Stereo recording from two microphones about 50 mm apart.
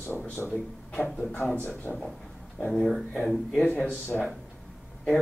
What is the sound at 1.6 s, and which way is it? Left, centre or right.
Speech, left.